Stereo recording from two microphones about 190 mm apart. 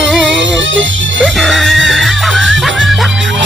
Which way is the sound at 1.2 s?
Centre (ahead or behind).